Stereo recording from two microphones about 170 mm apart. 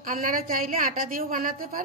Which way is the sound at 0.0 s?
55° right (ahead or behind).